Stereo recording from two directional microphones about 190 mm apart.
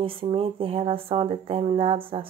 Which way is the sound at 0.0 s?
30° right (ahead or behind).